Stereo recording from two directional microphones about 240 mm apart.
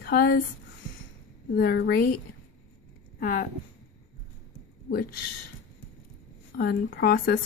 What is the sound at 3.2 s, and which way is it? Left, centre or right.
Speech, left.